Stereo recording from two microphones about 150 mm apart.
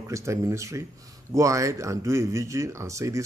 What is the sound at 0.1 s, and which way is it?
Speech, 20° right (ahead or behind).